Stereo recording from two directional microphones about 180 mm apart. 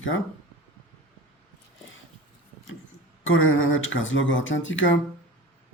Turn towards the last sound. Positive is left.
turn(degrees=90)